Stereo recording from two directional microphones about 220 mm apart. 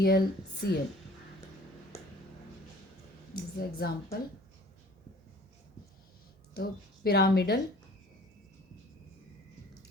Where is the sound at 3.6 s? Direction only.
45° left (ahead or behind).